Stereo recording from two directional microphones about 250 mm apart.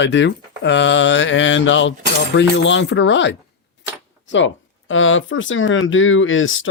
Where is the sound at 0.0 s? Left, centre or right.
Left.